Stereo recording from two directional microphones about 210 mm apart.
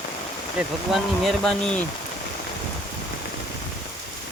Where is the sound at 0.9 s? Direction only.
Centre (ahead or behind).